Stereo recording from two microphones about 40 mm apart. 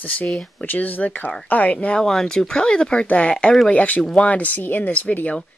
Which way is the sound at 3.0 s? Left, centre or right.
Left.